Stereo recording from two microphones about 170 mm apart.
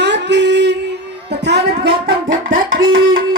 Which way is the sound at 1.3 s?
80° right.